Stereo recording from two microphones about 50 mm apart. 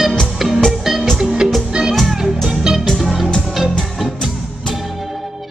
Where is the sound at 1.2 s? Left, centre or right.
Centre.